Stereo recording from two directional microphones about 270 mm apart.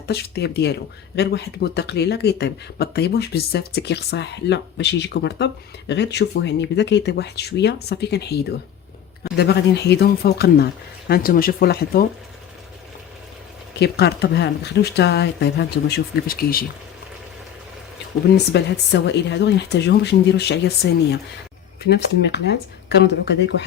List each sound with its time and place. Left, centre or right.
0.1 s speech: left
13.7 s speech: left
18.3 s speech: left